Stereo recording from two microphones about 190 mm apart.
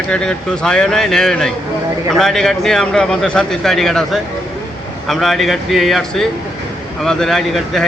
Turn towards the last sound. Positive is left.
turn(degrees=0)  # may be behind; listen again after turning